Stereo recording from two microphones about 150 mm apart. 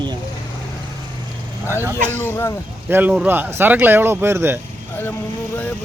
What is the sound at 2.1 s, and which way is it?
Speech, 15° left (ahead or behind).